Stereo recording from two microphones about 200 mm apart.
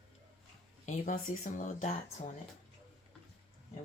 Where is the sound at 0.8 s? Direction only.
40° left (ahead or behind).